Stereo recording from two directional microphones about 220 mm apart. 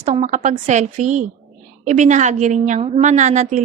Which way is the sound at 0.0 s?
30° right (ahead or behind).